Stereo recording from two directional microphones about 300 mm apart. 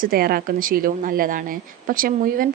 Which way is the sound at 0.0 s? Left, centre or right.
Right.